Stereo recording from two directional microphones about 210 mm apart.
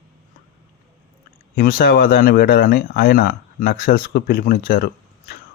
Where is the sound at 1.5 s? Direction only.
45° left (ahead or behind).